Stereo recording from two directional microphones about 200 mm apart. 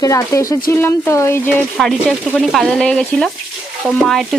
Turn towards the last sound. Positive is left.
turn(degrees=0)  # may be behind; listen again after turning